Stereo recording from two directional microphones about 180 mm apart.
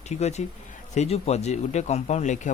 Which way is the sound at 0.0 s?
40° left (ahead or behind).